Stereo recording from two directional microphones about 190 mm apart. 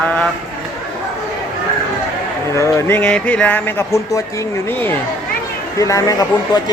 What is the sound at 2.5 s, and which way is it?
Speech, 15° left (ahead or behind).